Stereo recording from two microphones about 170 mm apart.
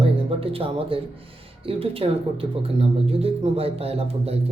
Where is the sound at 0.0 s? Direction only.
35° right (ahead or behind).